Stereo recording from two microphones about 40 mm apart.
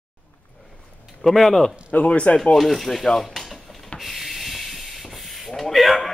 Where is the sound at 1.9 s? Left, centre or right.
Left.